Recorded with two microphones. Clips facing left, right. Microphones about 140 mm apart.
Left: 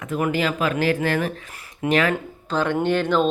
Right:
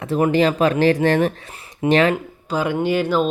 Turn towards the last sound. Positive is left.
turn(degrees=-5)  # may be behind; listen again after turning